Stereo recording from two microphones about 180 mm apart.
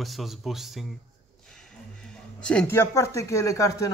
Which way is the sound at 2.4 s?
5° left (ahead or behind).